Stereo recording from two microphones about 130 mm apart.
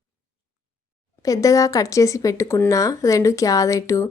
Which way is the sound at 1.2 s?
25° left (ahead or behind).